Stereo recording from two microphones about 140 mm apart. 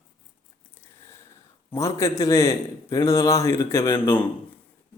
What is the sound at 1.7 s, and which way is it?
A man's voice, 20° left (ahead or behind).